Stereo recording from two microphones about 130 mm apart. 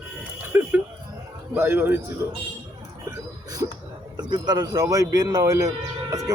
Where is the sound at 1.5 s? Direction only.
15° right (ahead or behind).